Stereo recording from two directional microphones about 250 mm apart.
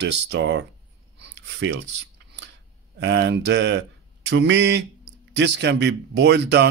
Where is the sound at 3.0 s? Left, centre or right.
Right.